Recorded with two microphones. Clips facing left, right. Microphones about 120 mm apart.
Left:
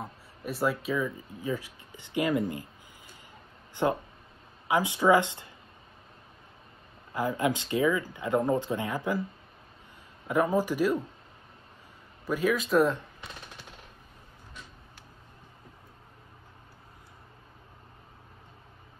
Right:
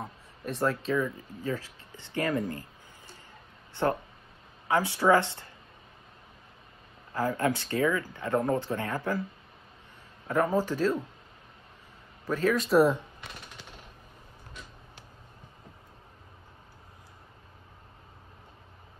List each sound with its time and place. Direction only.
0.0 s speech: 5° left (ahead or behind)
3.7 s speech: 15° left (ahead or behind)
7.2 s speech: 15° left (ahead or behind)
10.2 s speech: 10° left (ahead or behind)
12.3 s speech: 10° left (ahead or behind)
12.6 s speech: 5° right (ahead or behind)